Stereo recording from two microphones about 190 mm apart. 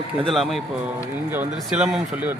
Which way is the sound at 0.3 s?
Centre (ahead or behind).